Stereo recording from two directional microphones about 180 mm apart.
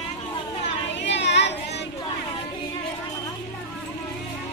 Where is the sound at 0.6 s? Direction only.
80° left.